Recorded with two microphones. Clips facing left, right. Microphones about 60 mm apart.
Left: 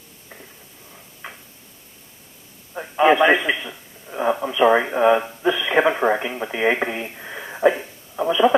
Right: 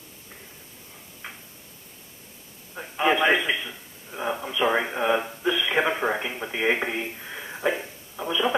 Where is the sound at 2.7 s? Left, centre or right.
Left.